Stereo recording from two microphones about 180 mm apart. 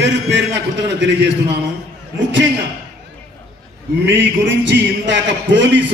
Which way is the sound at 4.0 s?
85° right.